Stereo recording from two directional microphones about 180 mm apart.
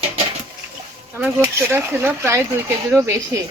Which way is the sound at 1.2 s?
15° right (ahead or behind).